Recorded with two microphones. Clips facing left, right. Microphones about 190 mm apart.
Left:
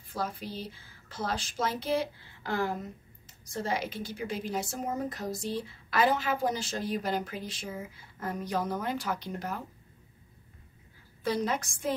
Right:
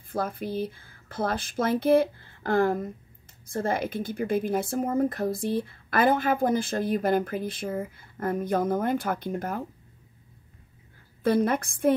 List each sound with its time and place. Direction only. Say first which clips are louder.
0.1 s a woman's voice: right 6 dB; 55° right (ahead or behind)
11.2 s a woman's voice: right 7 dB; 55° right (ahead or behind)